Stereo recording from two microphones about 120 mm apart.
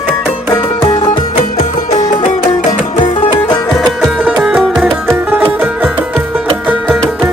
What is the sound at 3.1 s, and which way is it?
Music, 45° left (ahead or behind).